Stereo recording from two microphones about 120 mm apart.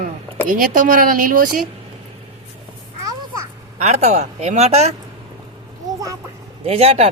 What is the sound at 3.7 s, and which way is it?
Speech, 65° right (ahead or behind).